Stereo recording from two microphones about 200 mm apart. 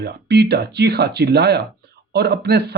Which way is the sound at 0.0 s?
55° right (ahead or behind).